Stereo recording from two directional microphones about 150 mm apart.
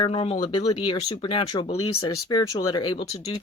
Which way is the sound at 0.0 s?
40° left (ahead or behind).